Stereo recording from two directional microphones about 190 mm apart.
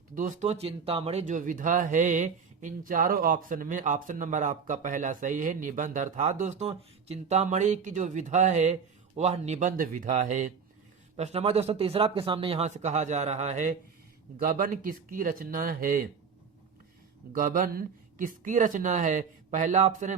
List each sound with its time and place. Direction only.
0.1 s speech: 40° right (ahead or behind)
17.3 s speech: 45° right (ahead or behind)